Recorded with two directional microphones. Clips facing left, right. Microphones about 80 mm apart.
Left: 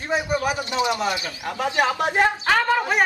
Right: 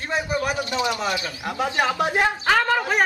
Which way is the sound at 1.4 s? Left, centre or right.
Centre.